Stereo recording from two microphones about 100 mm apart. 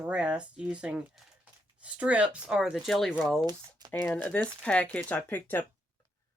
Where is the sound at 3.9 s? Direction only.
15° left (ahead or behind).